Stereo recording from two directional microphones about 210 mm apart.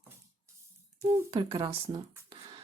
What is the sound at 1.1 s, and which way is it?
Speech, 20° right (ahead or behind).